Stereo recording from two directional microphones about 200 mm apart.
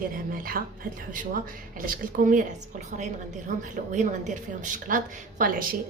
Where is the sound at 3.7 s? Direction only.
40° right (ahead or behind).